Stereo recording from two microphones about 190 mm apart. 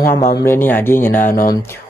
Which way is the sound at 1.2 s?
45° left (ahead or behind).